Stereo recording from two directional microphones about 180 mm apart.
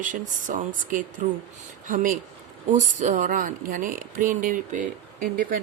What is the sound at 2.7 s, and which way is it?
Speech, 45° right (ahead or behind).